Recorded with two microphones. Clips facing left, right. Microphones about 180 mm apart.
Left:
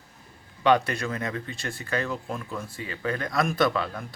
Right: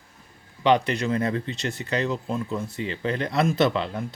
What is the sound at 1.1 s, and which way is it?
Speech, 30° right (ahead or behind).